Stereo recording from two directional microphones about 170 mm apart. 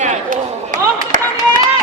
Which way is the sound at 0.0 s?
45° right (ahead or behind).